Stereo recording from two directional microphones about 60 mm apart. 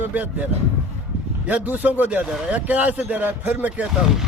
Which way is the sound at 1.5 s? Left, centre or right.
Right.